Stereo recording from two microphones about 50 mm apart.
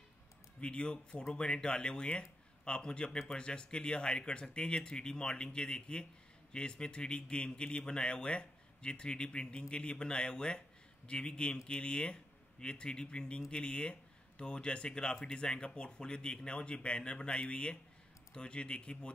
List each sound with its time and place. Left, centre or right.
0.6 s speech: centre